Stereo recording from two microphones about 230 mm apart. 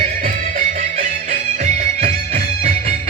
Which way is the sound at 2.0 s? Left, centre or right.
Right.